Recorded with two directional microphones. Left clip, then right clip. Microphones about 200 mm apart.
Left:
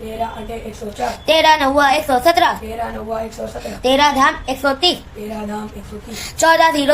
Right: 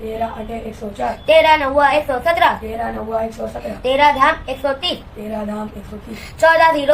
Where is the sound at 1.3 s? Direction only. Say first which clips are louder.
Right 1 dB; 70° left (ahead or behind).